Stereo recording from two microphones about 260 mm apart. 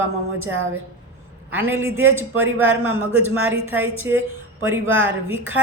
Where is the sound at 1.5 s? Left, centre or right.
Centre.